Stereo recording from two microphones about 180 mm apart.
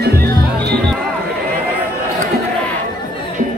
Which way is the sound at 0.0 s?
60° right (ahead or behind).